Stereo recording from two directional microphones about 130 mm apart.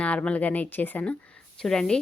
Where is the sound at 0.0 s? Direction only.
10° left (ahead or behind).